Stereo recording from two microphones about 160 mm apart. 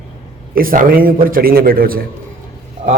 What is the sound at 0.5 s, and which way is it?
A man's voice, 65° right (ahead or behind).